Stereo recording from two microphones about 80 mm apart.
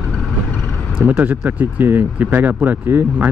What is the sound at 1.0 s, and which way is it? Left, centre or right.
Speech, right.